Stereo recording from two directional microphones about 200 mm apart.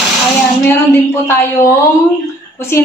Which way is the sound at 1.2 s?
15° left (ahead or behind).